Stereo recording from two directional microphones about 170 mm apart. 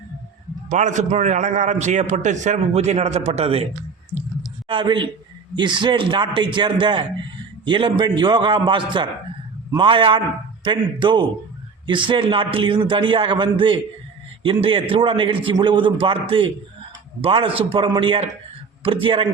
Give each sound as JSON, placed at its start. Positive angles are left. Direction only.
{"t": 0.7, "sound": "a man's voice", "side_deg": -45}
{"t": 4.7, "sound": "a man's voice", "side_deg": -30}